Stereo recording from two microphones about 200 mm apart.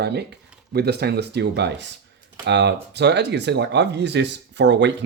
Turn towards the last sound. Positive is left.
turn(degrees=-60)  # may be behind; listen again after turning